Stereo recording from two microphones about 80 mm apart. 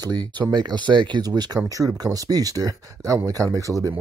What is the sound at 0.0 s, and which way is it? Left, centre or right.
Speech, right.